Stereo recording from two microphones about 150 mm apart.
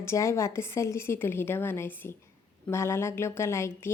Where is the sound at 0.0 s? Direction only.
20° left (ahead or behind).